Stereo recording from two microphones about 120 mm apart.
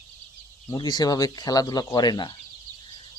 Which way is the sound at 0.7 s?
35° left (ahead or behind).